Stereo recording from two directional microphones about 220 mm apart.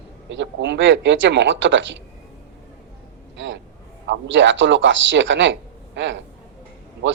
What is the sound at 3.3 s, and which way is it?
Vehicle, 55° right (ahead or behind).